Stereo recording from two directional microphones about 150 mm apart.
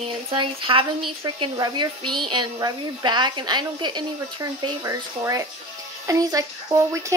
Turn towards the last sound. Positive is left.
turn(degrees=-20)  # may be behind; listen again after turning